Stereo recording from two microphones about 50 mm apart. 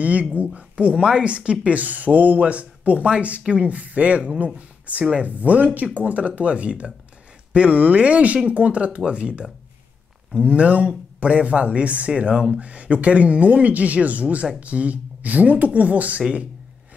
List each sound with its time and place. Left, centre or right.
0.0 s speech: right
4.6 s a sound: right
5.1 s speech: right